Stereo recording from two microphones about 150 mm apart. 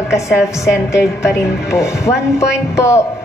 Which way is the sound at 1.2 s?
20° left (ahead or behind).